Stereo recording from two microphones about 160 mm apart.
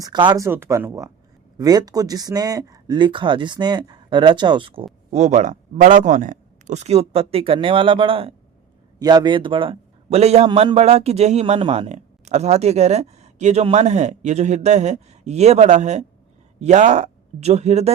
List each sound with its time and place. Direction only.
0.0 s speech: 25° right (ahead or behind)
5.1 s a man's voice: 45° right (ahead or behind)